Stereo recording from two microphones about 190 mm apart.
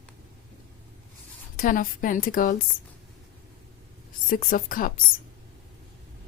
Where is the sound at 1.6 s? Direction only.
45° left (ahead or behind).